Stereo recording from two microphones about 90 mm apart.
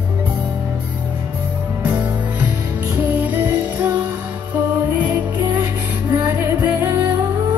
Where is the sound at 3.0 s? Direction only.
20° right (ahead or behind); by 7.2 s 40° right (ahead or behind).